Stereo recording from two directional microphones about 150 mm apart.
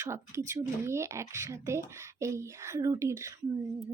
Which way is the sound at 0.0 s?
20° right (ahead or behind).